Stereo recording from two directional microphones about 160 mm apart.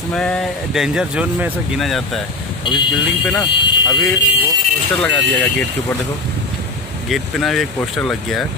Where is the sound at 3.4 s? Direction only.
25° left (ahead or behind).